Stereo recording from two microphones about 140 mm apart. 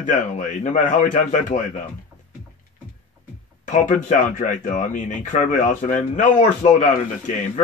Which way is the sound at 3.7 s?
65° left (ahead or behind).